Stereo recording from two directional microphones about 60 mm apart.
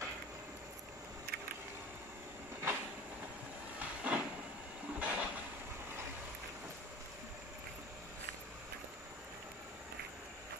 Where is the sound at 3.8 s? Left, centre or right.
Centre.